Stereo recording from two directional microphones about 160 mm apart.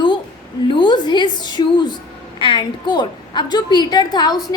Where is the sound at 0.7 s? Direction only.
30° left (ahead or behind).